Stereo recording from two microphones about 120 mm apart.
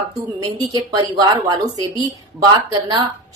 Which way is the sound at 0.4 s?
35° right (ahead or behind).